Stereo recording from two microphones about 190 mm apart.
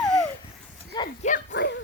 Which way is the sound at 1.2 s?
40° left (ahead or behind).